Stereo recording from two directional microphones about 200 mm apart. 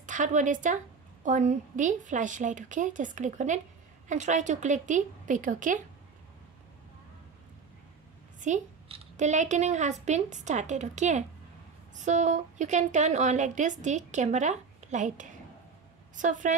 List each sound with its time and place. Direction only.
0.0 s a woman's voice: 40° right (ahead or behind)
8.4 s a woman's voice: 35° right (ahead or behind)